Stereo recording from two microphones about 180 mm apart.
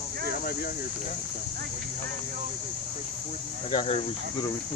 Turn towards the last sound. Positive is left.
turn(degrees=35)  # may be behind; listen again after turning